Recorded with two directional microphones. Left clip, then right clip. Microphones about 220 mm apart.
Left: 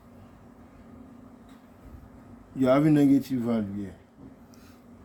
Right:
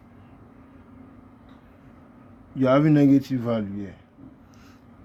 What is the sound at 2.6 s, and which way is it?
Speech, 35° right (ahead or behind).